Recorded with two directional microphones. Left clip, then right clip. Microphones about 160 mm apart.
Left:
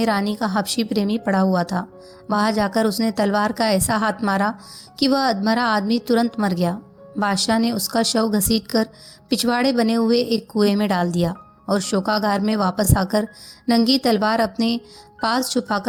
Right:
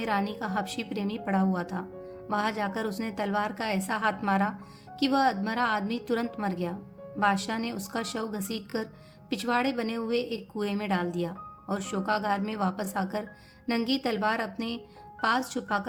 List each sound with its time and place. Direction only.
0.0 s a woman's voice: 40° left (ahead or behind)